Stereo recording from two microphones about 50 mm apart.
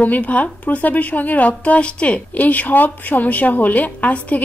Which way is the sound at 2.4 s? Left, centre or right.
Left.